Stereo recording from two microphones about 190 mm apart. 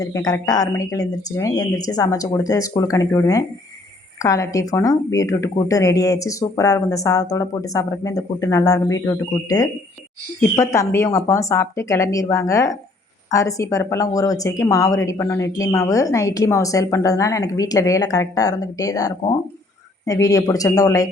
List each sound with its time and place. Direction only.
0.0 s a woman's voice: 20° left (ahead or behind)